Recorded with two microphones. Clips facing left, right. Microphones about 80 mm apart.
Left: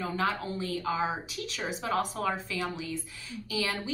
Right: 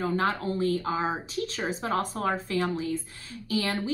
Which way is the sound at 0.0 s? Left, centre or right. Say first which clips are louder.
Right 4 dB; right.